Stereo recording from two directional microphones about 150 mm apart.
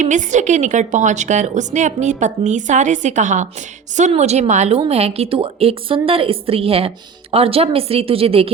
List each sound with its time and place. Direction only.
0.0 s a woman's voice: 55° right (ahead or behind)